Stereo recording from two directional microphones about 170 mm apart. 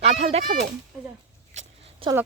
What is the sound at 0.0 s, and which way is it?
Speech, 40° right (ahead or behind).